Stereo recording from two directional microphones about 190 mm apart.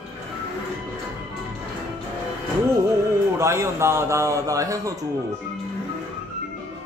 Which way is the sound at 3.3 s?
15° right (ahead or behind).